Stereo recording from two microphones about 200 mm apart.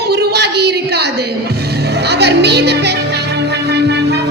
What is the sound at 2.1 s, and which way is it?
Music, 55° right (ahead or behind).